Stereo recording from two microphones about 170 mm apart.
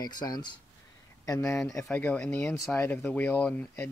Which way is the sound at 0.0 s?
25° left (ahead or behind).